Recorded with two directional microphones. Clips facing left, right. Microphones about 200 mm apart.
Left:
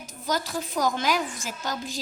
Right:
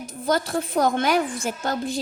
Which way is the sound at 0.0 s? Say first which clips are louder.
Right 6 dB; 55° right (ahead or behind).